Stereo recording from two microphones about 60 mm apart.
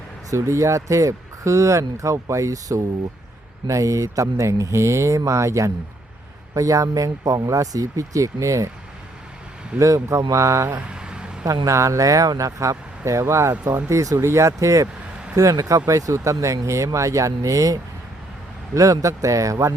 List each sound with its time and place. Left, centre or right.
0.3 s speech: right
6.5 s speech: right
9.7 s speech: right
10.8 s a sound: centre
11.4 s speech: right
14.2 s speech: right
15.4 s speech: right